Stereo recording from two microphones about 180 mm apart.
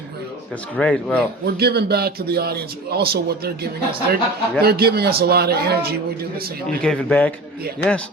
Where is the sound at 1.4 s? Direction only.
60° right (ahead or behind).